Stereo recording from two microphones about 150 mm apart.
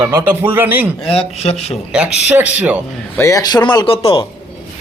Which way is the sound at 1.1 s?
40° left (ahead or behind).